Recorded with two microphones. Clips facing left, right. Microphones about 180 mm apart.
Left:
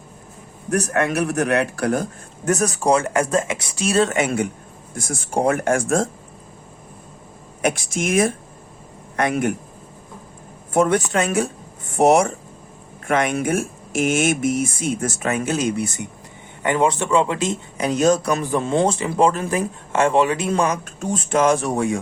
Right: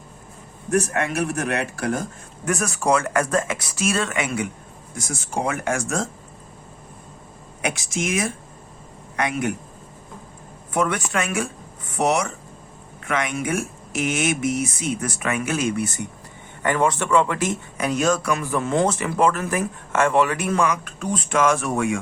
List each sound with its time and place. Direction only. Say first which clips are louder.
0.9 s a man's voice: left 4 dB; 60° left (ahead or behind)
2.6 s speech: left 1 dB; 35° left (ahead or behind)
4.9 s a man's voice: left 5 dB; 55° left (ahead or behind)
7.6 s speech: left 4 dB; 50° left (ahead or behind)
10.8 s speech: left 5 dB; 45° left (ahead or behind)
11.9 s speech: left 6 dB; 50° left (ahead or behind)
15.2 s speech: left 2 dB; 35° left (ahead or behind)
18.0 s speech: left 5 dB; 40° left (ahead or behind)